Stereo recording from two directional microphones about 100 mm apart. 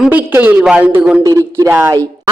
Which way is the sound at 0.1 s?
15° right (ahead or behind).